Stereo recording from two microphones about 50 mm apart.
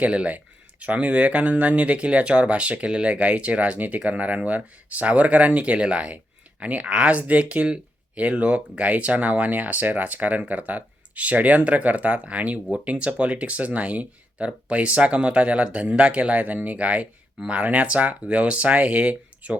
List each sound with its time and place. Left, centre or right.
0.0 s speech: right